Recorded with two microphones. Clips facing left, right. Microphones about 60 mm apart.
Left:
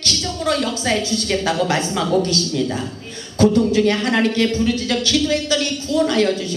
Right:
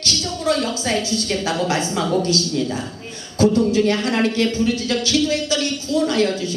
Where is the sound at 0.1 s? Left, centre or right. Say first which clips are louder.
Even; left.